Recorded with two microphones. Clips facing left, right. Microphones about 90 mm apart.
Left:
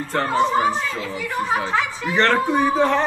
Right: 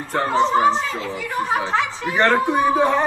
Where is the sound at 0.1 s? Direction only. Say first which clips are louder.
Right 1 dB; 15° right (ahead or behind).